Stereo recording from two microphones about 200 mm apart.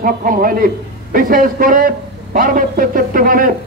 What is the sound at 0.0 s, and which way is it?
A man's voice, 45° right (ahead or behind).